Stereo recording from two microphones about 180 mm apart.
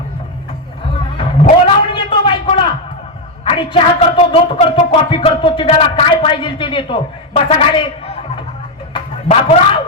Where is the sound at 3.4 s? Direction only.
30° left (ahead or behind).